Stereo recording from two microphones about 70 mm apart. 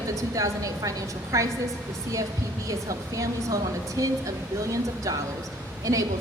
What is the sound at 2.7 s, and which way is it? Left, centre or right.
A woman's voice, right.